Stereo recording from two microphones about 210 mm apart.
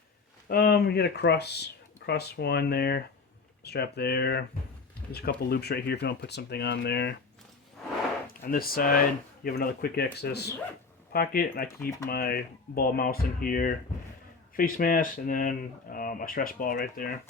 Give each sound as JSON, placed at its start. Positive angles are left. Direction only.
{"t": 0.4, "sound": "speech", "side_deg": 45}
{"t": 8.3, "sound": "speech", "side_deg": 45}
{"t": 11.8, "sound": "speech", "side_deg": 15}
{"t": 12.0, "sound": "speech", "side_deg": 45}